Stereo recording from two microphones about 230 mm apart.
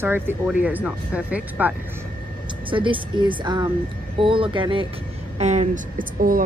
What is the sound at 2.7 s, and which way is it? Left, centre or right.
Speech, right.